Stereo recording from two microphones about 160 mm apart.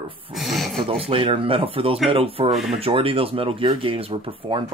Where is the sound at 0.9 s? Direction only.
35° right (ahead or behind).